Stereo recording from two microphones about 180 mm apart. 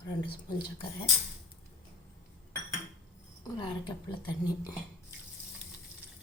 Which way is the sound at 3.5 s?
25° left (ahead or behind).